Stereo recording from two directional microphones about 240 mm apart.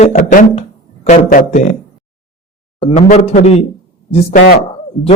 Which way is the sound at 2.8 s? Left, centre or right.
Left.